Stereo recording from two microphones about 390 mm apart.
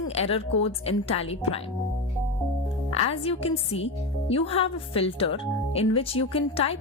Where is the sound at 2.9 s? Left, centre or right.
Centre.